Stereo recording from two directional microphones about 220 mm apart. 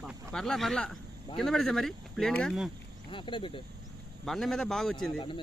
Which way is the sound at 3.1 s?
20° left (ahead or behind).